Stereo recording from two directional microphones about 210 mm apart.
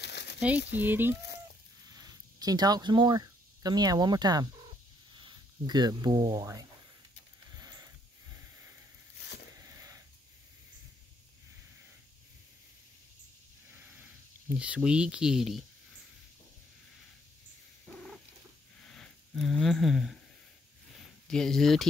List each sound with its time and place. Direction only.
0.0 s crumpling: 55° left (ahead or behind)
0.7 s speech: 10° right (ahead or behind)
7.5 s sniff: 15° right (ahead or behind)
9.6 s a sound: 15° right (ahead or behind)
13.7 s a sound: 10° right (ahead or behind)
14.6 s speech: 5° right (ahead or behind)
17.9 s purr: centre (ahead or behind)
18.9 s a sound: centre (ahead or behind)
21.3 s speech: centre (ahead or behind)